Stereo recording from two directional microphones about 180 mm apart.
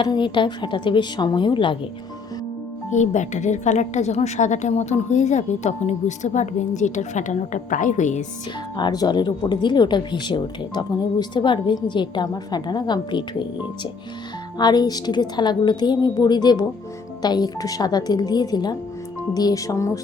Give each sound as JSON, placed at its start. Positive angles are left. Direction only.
{"t": 0.0, "sound": "speech", "side_deg": 25}
{"t": 2.9, "sound": "a woman's voice", "side_deg": 40}
{"t": 8.7, "sound": "speech", "side_deg": 25}
{"t": 14.6, "sound": "speech", "side_deg": 20}